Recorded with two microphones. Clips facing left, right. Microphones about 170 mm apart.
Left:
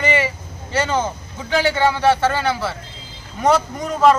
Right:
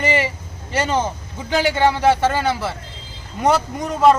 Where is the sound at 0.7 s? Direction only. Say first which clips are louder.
Even; 15° right (ahead or behind).